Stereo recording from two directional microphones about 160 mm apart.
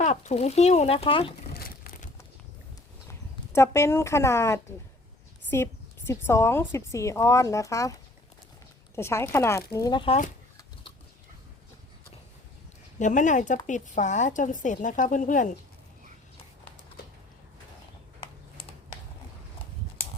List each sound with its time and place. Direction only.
0.0 s a woman's voice: 45° left (ahead or behind)
1.5 s crumpling: 70° left (ahead or behind)
3.1 s speech: 15° left (ahead or behind)
6.1 s a woman's voice: 15° left (ahead or behind)
9.0 s a woman's voice: 15° left (ahead or behind)
13.0 s a woman's voice: 50° left (ahead or behind)